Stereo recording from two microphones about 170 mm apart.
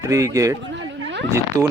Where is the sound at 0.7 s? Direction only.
90° right.